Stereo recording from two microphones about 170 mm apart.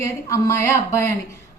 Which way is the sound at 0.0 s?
15° left (ahead or behind).